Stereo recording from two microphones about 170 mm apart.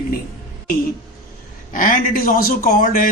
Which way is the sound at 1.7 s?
50° left (ahead or behind).